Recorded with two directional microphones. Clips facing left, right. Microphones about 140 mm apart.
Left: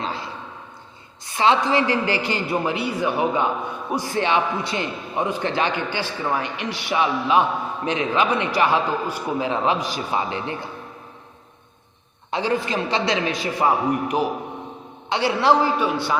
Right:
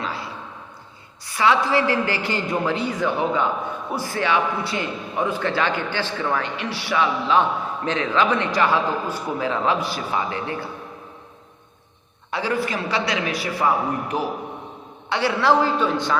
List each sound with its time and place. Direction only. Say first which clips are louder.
0.0 s a sound: left 1 dB; 25° left (ahead or behind)
1.2 s a man's voice: left 1 dB; 25° left (ahead or behind)
12.3 s a man's voice: left 1 dB; 20° left (ahead or behind)